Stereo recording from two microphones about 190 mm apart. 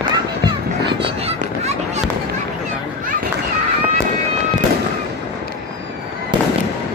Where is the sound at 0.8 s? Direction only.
30° right (ahead or behind).